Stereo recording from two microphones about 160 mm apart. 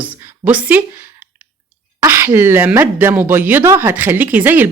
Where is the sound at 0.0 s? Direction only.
10° right (ahead or behind).